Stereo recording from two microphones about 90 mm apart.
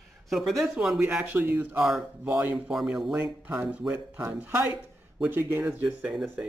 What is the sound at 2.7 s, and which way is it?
Speech, 5° right (ahead or behind).